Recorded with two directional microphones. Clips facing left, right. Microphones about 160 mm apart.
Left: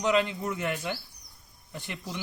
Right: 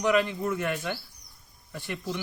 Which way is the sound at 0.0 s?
20° left (ahead or behind).